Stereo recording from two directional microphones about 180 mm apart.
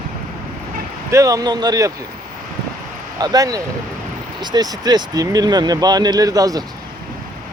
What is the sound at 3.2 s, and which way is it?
Speech, 20° right (ahead or behind).